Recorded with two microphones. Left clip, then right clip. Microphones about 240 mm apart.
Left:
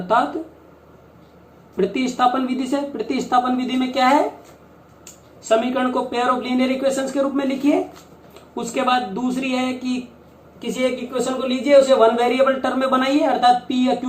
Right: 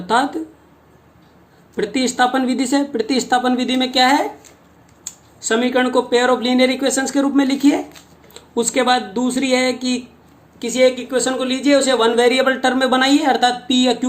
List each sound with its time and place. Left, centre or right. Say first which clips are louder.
1.8 s speech: right 1 dB; right
5.4 s speech: right 2 dB; right